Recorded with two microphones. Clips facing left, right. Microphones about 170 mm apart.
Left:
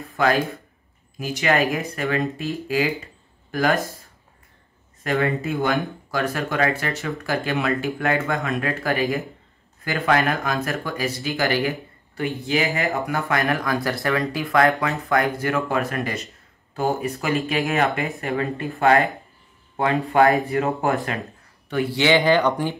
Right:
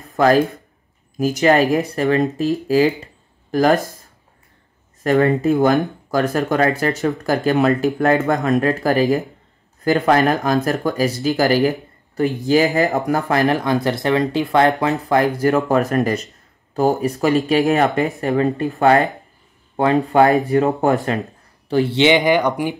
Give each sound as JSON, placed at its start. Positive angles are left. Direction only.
{"t": 0.1, "sound": "a sound", "side_deg": -40}
{"t": 1.1, "sound": "speech", "side_deg": -40}
{"t": 5.0, "sound": "speech", "side_deg": -40}
{"t": 20.4, "sound": "speech", "side_deg": -35}